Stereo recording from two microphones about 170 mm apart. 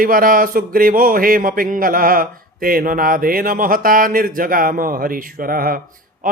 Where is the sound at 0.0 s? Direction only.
55° right (ahead or behind).